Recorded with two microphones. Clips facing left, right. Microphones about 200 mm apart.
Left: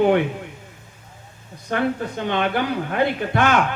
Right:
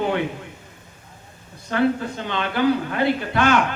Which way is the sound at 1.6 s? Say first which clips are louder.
Right 2 dB; 55° left (ahead or behind).